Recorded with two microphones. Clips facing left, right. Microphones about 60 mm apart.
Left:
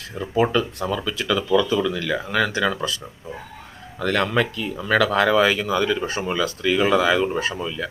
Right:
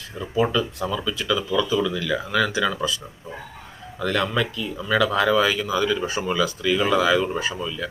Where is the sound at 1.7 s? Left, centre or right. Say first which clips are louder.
Left 1 dB; left.